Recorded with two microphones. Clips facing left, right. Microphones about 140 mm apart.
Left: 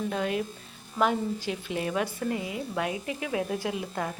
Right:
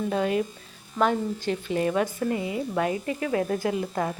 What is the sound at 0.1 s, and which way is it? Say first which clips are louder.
Speech: right 4 dB; centre (ahead or behind).